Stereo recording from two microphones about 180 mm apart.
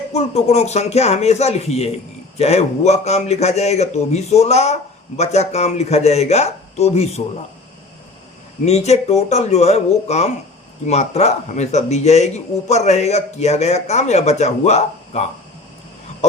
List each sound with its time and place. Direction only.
0.1 s a man's voice: 35° left (ahead or behind)
8.6 s a man's voice: 35° left (ahead or behind)